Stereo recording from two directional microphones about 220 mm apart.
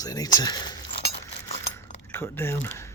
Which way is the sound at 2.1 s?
10° left (ahead or behind).